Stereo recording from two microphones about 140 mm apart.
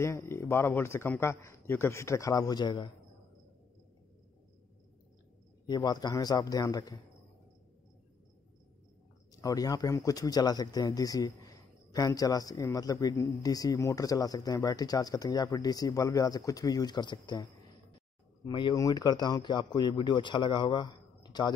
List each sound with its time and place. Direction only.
0.0 s speech: 20° left (ahead or behind)
5.7 s speech: 30° left (ahead or behind)
9.4 s speech: 25° left (ahead or behind)
18.5 s speech: 35° left (ahead or behind)